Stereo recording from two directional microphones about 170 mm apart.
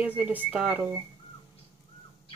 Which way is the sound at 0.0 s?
10° right (ahead or behind).